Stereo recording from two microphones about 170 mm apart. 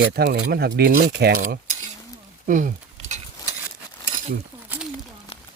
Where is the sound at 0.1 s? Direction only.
70° right (ahead or behind).